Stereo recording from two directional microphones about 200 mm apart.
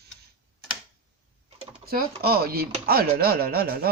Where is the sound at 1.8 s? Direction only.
50° right (ahead or behind).